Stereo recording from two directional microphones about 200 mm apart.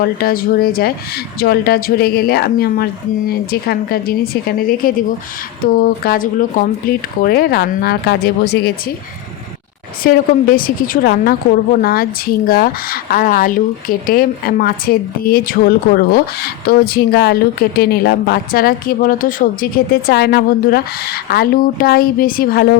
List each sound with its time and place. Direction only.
0.0 s speech: 50° left (ahead or behind)
10.0 s speech: 45° left (ahead or behind)